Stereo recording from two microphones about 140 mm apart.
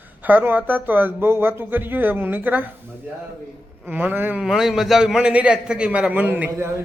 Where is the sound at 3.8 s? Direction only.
15° right (ahead or behind).